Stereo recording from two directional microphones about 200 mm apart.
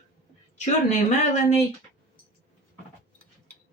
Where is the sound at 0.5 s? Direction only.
35° left (ahead or behind).